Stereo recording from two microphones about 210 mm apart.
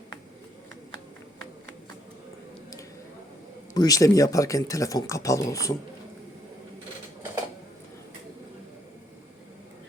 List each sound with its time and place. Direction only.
3.8 s speech: 15° left (ahead or behind)